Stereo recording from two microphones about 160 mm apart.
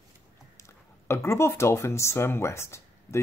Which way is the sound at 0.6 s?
15° left (ahead or behind).